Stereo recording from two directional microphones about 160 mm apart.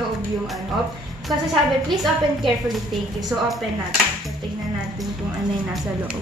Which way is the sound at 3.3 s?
Centre (ahead or behind).